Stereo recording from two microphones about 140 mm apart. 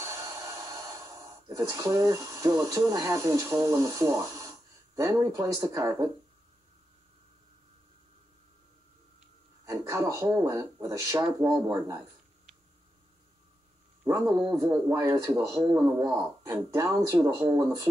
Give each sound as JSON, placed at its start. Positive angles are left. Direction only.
{"t": 0.0, "sound": "speech", "side_deg": -20}
{"t": 9.7, "sound": "speech", "side_deg": -25}
{"t": 14.0, "sound": "speech", "side_deg": -25}